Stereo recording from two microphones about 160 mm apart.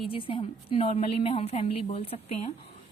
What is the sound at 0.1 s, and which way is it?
A woman's voice, 35° left (ahead or behind).